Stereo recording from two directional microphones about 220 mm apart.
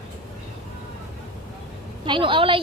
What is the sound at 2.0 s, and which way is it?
Speech, 20° right (ahead or behind).